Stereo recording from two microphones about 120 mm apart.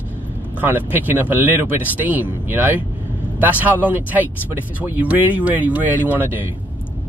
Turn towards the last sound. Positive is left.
turn(degrees=-15)  # may be behind; listen again after turning